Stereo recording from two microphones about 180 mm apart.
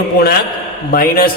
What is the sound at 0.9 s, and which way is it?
Speech, 55° left (ahead or behind).